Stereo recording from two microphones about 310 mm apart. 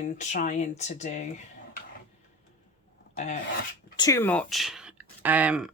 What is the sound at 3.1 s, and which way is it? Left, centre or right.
Speech, left.